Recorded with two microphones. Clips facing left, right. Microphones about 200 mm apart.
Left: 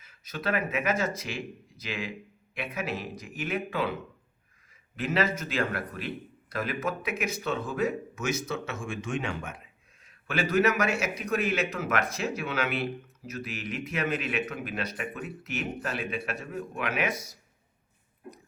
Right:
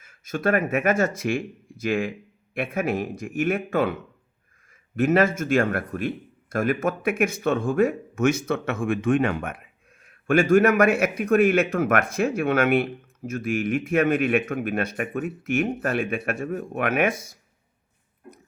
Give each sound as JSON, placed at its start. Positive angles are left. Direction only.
{"t": 0.0, "sound": "a man's voice", "side_deg": -50}
{"t": 4.9, "sound": "a man's voice", "side_deg": -50}